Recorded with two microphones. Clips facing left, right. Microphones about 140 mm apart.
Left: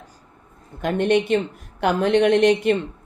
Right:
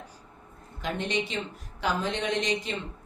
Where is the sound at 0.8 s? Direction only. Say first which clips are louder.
Left 11 dB; 55° left (ahead or behind).